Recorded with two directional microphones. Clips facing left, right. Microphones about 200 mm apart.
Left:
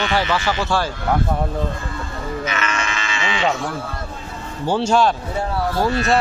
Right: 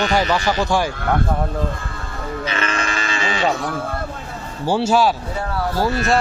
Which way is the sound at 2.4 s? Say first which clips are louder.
Right 3 dB; 30° right (ahead or behind).